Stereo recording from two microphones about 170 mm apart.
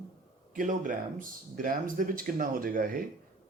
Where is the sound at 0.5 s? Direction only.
50° right (ahead or behind).